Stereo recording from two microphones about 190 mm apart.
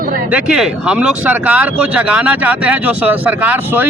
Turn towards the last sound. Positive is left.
turn(degrees=-10)  # may be behind; listen again after turning